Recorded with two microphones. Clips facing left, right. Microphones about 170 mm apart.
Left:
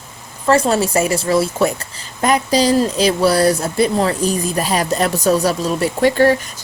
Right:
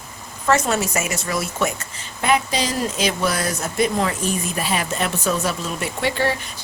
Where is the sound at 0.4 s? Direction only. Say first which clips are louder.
Left 5 dB; 30° left (ahead or behind).